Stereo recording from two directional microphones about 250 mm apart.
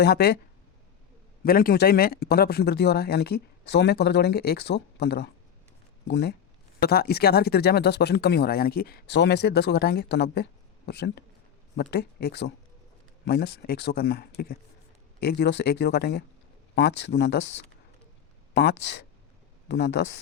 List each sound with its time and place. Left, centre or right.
0.0 s speech: left
1.5 s speech: left